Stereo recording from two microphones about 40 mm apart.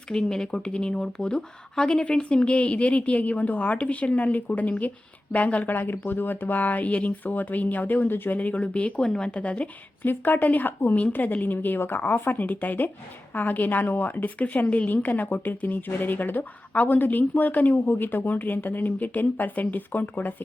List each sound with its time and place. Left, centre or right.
0.1 s speech: centre; by 5.6 s left
5.6 s speech: left
8.4 s speech: left
9.0 s speech: centre
10.0 s speech: left
11.1 s speech: left
14.3 s speech: left
17.8 s speech: left